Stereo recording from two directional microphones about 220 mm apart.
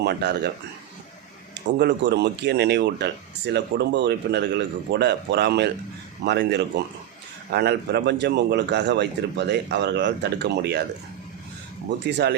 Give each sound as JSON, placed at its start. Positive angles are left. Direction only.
{"t": 0.0, "sound": "speech", "side_deg": -50}
{"t": 1.8, "sound": "speech", "side_deg": -50}
{"t": 11.9, "sound": "speech", "side_deg": -50}